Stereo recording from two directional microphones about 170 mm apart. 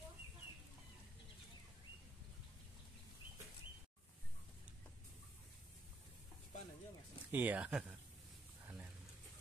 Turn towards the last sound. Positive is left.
turn(degrees=-5)  # may be behind; listen again after turning